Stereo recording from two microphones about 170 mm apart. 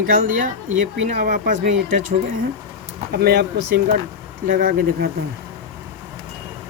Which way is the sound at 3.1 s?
65° right (ahead or behind).